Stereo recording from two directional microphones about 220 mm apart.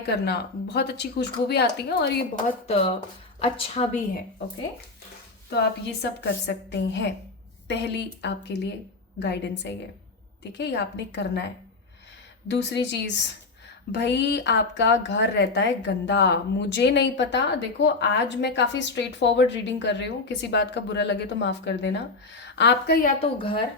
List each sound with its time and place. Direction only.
0.1 s a woman's voice: 50° left (ahead or behind)
3.4 s a woman's voice: 25° left (ahead or behind)
6.0 s a woman's voice: 50° left (ahead or behind)
12.5 s a woman's voice: 55° left (ahead or behind)
23.2 s a woman's voice: 25° left (ahead or behind)